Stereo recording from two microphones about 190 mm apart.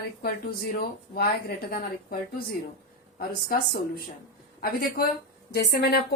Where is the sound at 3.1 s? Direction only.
50° left (ahead or behind).